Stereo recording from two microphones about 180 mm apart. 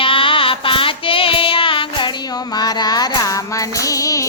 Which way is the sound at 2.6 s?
20° left (ahead or behind).